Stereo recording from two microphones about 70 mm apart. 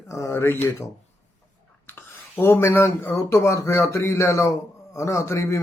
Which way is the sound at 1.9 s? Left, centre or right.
Left.